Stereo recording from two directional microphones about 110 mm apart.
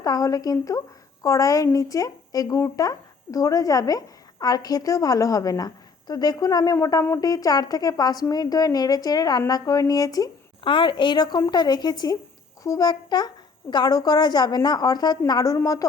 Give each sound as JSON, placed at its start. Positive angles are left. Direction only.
{"t": 0.0, "sound": "a woman's voice", "side_deg": 35}
{"t": 6.7, "sound": "a sound", "side_deg": 25}
{"t": 7.2, "sound": "a woman's voice", "side_deg": 35}
{"t": 10.6, "sound": "a woman's voice", "side_deg": 50}